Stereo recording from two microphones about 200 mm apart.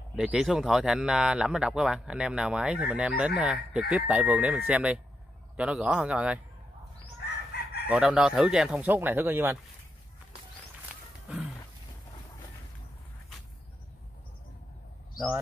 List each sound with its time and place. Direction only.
0.1 s speech: 5° right (ahead or behind)
7.5 s chicken: 55° left (ahead or behind)
7.9 s speech: 5° right (ahead or behind)
11.2 s a sound: centre (ahead or behind)